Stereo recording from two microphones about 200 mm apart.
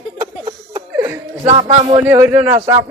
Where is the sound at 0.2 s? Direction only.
20° right (ahead or behind).